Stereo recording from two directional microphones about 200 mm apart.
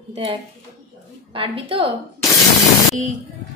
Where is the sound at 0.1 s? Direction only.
30° right (ahead or behind).